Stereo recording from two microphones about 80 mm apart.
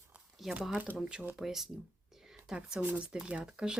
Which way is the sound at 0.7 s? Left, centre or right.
Right.